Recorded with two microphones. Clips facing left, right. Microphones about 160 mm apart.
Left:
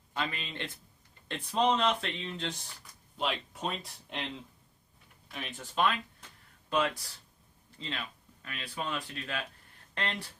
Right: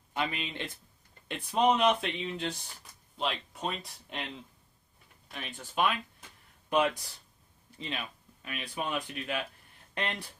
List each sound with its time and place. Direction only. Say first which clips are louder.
0.1 s a man's voice: right 2 dB; 15° right (ahead or behind)
3.2 s speech: even; 5° left (ahead or behind)
6.7 s speech: right 3 dB; 20° right (ahead or behind)